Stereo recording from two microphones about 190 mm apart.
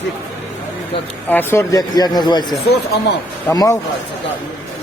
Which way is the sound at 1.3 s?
10° left (ahead or behind).